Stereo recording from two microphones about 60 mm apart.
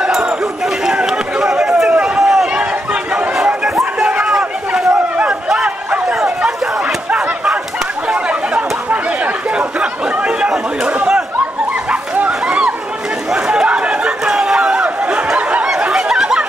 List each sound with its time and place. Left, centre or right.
0.0 s chatter: centre
1.9 s run: right
2.1 s run: centre
2.6 s a sound: centre
7.1 s a sound: right
8.1 s chatter: centre
11.9 s dog: centre
13.3 s chatter: centre
15.7 s a sound: centre